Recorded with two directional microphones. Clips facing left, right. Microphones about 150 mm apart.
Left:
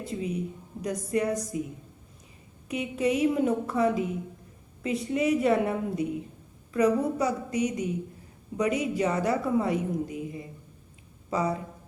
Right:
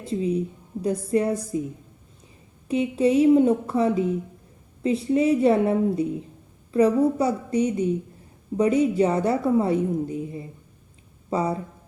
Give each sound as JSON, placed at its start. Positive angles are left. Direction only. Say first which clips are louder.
{"t": 0.1, "sound": "a woman's voice", "louder": "right 9 dB", "side_deg": -30}
{"t": 2.6, "sound": "a woman's voice", "louder": "right 6 dB", "side_deg": -30}